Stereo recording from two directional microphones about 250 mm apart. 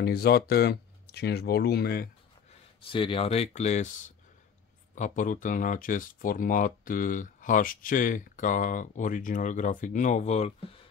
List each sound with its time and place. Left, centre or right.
0.0 s speech: left
2.9 s speech: left